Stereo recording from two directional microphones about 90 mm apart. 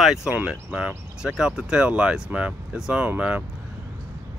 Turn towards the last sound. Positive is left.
turn(degrees=-15)  # may be behind; listen again after turning